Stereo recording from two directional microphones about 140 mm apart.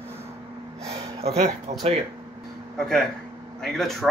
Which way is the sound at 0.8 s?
50° right (ahead or behind).